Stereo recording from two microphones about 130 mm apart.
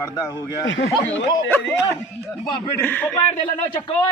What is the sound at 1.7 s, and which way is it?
A man's voice, 20° left (ahead or behind).